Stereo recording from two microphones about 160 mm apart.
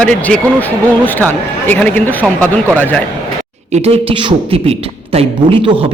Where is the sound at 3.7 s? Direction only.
40° right (ahead or behind).